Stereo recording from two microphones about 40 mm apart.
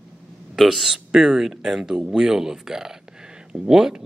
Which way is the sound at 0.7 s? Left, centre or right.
Centre.